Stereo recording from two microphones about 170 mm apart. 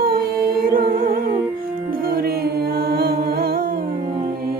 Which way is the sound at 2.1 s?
60° right (ahead or behind).